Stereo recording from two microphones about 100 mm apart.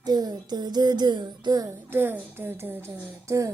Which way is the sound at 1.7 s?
20° right (ahead or behind).